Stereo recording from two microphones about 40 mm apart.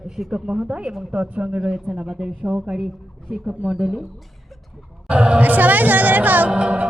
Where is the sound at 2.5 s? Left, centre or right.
Right.